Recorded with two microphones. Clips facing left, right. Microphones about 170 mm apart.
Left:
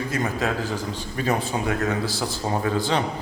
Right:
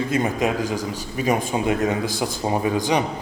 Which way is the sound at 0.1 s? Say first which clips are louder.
Right 3 dB; 20° right (ahead or behind).